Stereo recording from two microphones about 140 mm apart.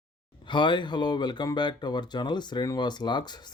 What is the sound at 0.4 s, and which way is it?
Speech, 35° left (ahead or behind).